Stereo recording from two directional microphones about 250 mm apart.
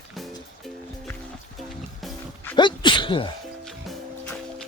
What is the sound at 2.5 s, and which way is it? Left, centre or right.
Sneeze, centre.